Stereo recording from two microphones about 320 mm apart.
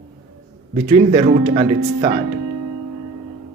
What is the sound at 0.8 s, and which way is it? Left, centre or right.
Speech, centre.